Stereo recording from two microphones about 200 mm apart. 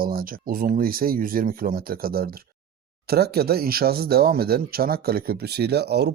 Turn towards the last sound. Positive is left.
turn(degrees=-55)  # may be behind; listen again after turning